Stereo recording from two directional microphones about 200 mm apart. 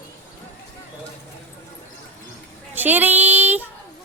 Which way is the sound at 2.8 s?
10° right (ahead or behind).